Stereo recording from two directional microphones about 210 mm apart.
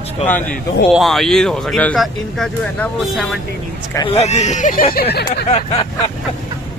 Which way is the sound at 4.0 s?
25° left (ahead or behind).